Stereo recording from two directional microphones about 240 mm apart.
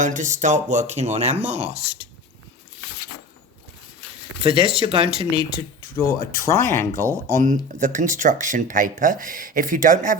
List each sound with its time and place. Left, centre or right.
0.0 s speech: right
4.4 s speech: right
6.0 s speech: centre
7.3 s speech: right